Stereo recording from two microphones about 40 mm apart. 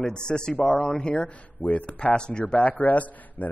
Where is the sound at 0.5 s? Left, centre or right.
Left.